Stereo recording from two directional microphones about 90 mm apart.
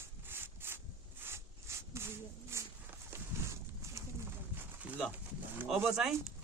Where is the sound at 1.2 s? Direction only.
30° right (ahead or behind).